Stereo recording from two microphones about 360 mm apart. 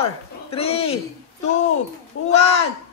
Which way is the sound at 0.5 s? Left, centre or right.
Centre.